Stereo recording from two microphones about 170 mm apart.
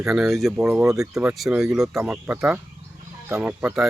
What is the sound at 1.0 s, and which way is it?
Speech, 5° right (ahead or behind).